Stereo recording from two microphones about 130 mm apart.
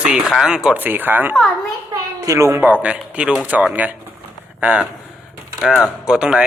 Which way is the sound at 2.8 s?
10° right (ahead or behind).